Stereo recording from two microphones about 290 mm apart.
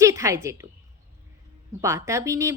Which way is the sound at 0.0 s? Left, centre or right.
Centre.